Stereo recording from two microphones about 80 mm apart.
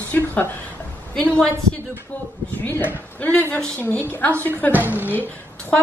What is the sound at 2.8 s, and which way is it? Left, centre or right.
A woman's voice, left.